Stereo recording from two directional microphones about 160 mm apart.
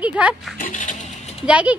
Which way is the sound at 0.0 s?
10° right (ahead or behind).